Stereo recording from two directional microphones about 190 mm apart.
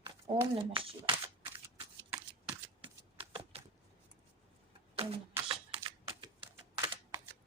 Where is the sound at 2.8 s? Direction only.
30° right (ahead or behind).